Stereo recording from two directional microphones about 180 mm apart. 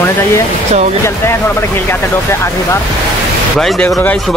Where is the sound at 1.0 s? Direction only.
15° left (ahead or behind).